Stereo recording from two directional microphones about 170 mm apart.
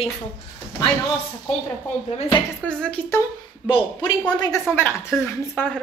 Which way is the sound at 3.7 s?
25° left (ahead or behind).